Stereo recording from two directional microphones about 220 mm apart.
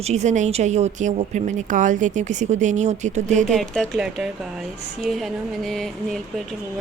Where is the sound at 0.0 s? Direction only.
30° right (ahead or behind).